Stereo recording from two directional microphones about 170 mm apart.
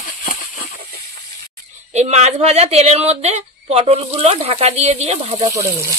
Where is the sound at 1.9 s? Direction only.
40° right (ahead or behind).